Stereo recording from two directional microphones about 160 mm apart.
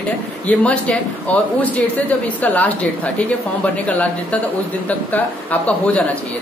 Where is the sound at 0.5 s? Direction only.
10° left (ahead or behind).